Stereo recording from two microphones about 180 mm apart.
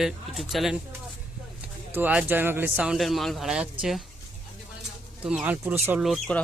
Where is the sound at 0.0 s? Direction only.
Centre (ahead or behind).